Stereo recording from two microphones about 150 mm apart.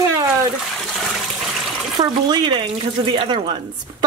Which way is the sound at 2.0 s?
30° right (ahead or behind).